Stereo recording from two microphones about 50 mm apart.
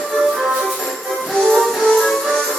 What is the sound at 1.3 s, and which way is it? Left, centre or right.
Music, centre.